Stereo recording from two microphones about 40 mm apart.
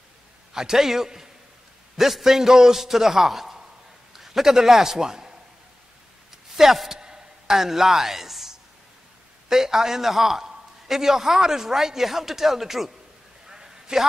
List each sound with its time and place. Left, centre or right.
0.5 s a man's voice: centre
6.5 s a man's voice: centre
7.0 s chopping: centre
9.5 s a man's voice: centre
13.5 s a sound: centre